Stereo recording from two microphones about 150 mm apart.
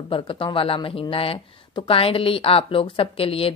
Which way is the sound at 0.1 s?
35° left (ahead or behind).